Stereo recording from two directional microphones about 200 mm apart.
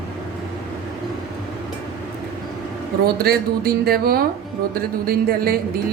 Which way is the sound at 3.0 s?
50° right (ahead or behind).